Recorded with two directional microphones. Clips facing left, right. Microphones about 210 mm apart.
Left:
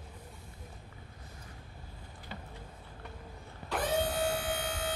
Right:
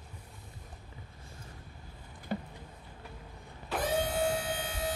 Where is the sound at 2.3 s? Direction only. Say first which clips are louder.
Right 11 dB; 50° right (ahead or behind).